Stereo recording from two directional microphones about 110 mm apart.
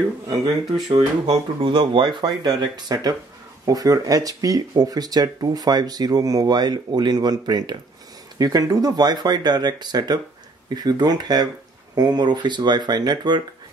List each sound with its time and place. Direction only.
0.8 s speech: 45° right (ahead or behind)